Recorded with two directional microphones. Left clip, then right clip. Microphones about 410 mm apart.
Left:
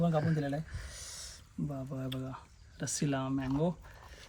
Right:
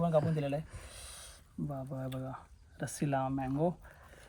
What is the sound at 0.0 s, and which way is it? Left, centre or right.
Speech, centre.